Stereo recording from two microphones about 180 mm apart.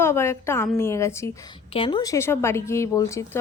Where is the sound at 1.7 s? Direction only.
30° left (ahead or behind).